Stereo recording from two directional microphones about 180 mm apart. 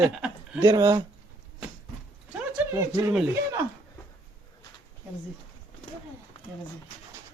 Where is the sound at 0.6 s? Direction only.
20° right (ahead or behind).